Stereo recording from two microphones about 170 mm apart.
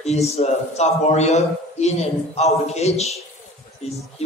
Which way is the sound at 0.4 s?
40° left (ahead or behind).